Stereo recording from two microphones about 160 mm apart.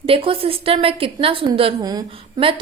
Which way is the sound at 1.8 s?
25° right (ahead or behind).